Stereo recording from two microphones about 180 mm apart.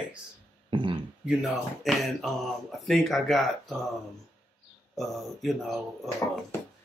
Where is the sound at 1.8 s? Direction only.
Centre (ahead or behind).